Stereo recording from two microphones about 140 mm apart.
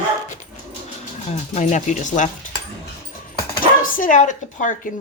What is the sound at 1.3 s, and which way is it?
Speech, 55° left (ahead or behind).